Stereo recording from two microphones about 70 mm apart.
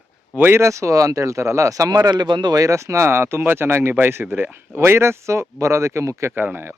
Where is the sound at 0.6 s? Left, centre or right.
Right.